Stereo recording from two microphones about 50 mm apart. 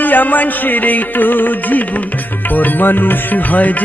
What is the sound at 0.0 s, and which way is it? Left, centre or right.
Music, left.